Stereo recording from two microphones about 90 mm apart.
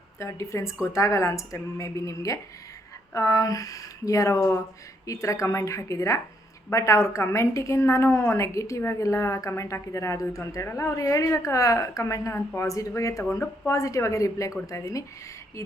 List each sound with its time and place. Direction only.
0.2 s a woman's voice: 35° left (ahead or behind)